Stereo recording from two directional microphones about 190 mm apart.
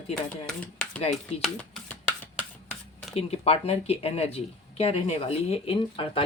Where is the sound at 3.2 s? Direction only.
30° left (ahead or behind).